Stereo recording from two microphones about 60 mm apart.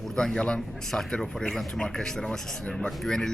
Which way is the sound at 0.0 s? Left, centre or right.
Centre.